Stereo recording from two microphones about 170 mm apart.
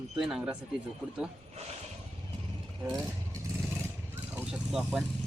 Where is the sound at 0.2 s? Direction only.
5° right (ahead or behind).